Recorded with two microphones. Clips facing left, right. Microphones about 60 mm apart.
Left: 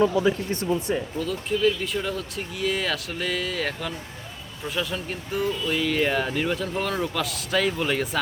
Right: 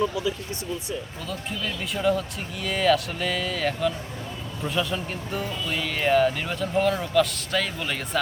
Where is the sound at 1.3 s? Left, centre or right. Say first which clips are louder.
Left 8 dB; centre.